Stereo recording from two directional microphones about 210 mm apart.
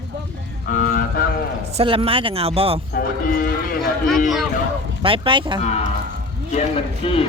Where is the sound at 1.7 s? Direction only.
25° right (ahead or behind).